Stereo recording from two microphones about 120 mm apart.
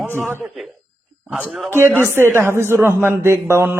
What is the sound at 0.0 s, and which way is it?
Speech, 15° right (ahead or behind).